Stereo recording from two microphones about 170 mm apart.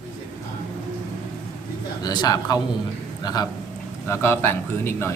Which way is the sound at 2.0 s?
25° left (ahead or behind).